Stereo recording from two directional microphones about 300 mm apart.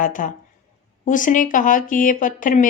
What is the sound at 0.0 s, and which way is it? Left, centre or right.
Speech, left.